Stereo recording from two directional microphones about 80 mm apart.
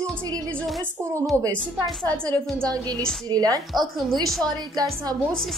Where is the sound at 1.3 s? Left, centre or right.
Right.